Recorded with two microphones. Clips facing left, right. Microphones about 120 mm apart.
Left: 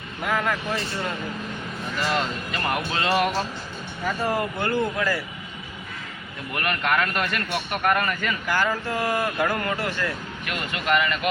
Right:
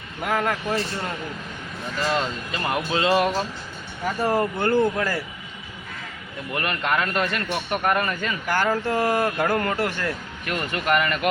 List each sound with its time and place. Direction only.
0.3 s speech: 40° right (ahead or behind)
2.0 s speech: 30° right (ahead or behind)
4.3 s speech: 40° right (ahead or behind)
6.5 s speech: 25° right (ahead or behind)
8.4 s speech: 35° right (ahead or behind)